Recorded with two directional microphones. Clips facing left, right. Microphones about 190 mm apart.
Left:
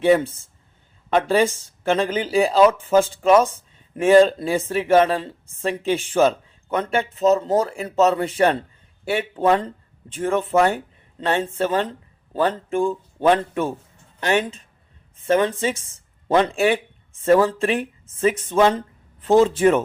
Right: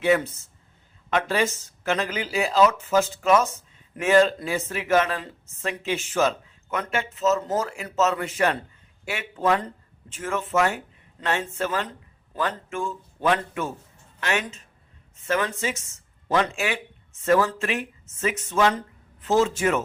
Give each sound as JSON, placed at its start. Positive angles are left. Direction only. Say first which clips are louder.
{"t": 1.1, "sound": "speech", "louder": "left 6 dB", "side_deg": 30}